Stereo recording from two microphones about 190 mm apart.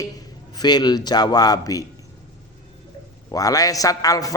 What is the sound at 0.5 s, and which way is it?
A man's voice, 20° left (ahead or behind).